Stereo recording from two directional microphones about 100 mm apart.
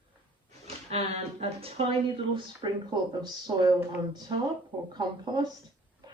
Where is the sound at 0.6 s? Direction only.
90° right.